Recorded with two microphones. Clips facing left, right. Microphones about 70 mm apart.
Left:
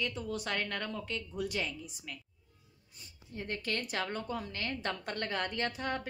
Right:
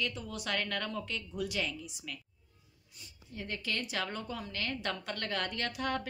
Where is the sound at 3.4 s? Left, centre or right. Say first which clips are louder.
Left 1 dB; left.